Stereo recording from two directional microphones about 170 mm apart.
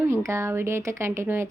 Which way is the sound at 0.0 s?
15° right (ahead or behind).